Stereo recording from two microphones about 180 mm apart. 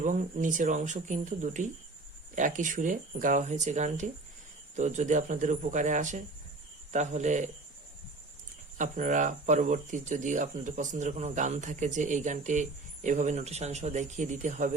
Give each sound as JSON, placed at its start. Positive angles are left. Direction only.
{"t": 0.0, "sound": "speech", "side_deg": -45}
{"t": 8.8, "sound": "speech", "side_deg": -45}